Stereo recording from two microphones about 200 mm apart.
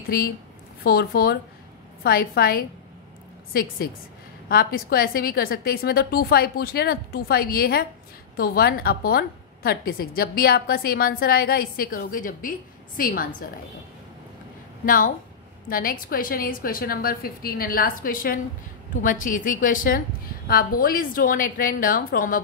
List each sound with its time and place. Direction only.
0.8 s a woman's voice: 50° left (ahead or behind)
14.9 s a woman's voice: 45° left (ahead or behind)